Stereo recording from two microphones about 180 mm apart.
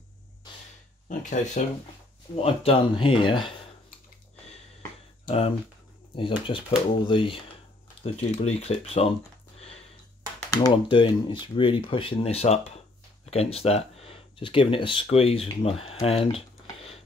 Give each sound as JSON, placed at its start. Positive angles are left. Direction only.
{"t": 1.0, "sound": "speech", "side_deg": 45}
{"t": 2.3, "sound": "speech", "side_deg": 30}
{"t": 5.2, "sound": "speech", "side_deg": 30}
{"t": 10.5, "sound": "speech", "side_deg": 25}